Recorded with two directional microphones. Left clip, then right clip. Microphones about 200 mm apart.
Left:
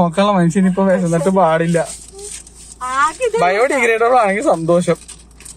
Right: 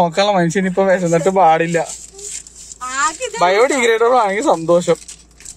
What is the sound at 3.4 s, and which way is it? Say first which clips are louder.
Speech: right 2 dB; 10° right (ahead or behind).